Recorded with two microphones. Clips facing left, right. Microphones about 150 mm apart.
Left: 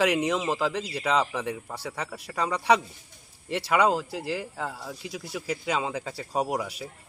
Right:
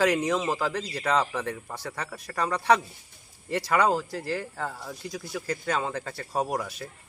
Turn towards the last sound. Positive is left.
turn(degrees=10)  # may be behind; listen again after turning